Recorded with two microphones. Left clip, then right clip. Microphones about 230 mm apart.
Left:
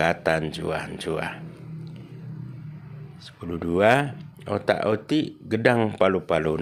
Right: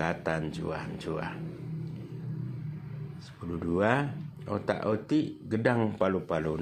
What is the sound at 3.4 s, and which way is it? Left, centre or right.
Speech, left.